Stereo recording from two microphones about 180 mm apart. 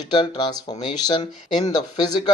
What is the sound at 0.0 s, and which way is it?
A man's voice, 25° left (ahead or behind).